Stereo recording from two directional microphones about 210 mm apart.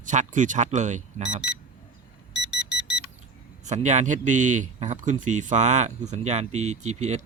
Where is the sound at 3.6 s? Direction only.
35° right (ahead or behind).